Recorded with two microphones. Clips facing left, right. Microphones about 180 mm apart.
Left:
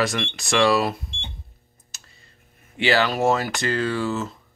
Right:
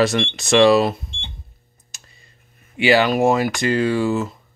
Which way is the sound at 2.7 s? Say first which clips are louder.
Right 5 dB; 15° right (ahead or behind).